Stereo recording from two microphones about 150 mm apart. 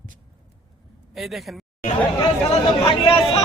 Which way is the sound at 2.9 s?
35° left (ahead or behind).